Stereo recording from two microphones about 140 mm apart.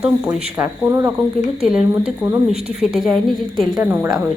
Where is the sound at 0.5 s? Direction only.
20° right (ahead or behind).